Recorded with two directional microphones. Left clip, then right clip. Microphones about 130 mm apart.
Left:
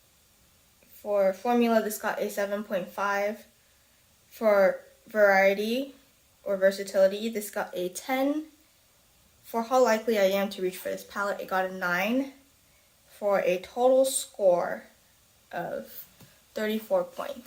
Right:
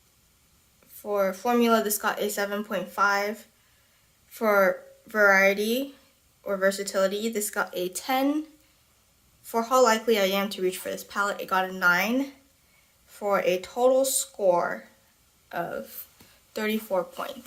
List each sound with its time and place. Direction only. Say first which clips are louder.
1.0 s speech: left 1 dB; 40° right (ahead or behind)
4.4 s speech: even; 40° right (ahead or behind)
9.5 s speech: right 2 dB; 40° right (ahead or behind)
13.1 s speech: right 1 dB; 40° right (ahead or behind)